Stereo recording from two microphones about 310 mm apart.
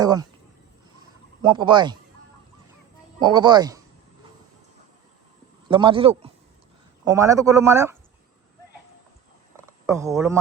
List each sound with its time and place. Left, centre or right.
0.0 s speech: centre
1.4 s speech: centre
3.2 s speech: centre
5.6 s speech: centre
9.6 s speech: centre